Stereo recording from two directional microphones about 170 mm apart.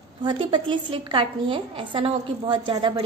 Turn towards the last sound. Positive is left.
turn(degrees=-30)  # may be behind; listen again after turning